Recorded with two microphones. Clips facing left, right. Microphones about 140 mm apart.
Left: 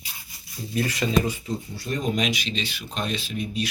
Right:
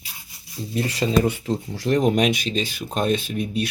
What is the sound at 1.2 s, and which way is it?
Speech, 70° right (ahead or behind).